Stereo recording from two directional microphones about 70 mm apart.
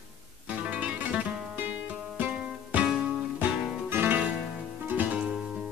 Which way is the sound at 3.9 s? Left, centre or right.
Right.